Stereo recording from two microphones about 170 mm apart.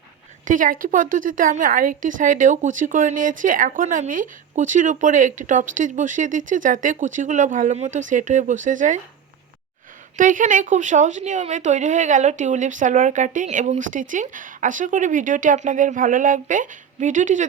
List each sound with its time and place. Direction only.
0.4 s a woman's voice: 50° right (ahead or behind)
10.2 s a woman's voice: 50° right (ahead or behind)